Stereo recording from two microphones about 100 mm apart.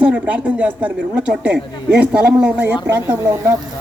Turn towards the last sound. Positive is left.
turn(degrees=-20)  # may be behind; listen again after turning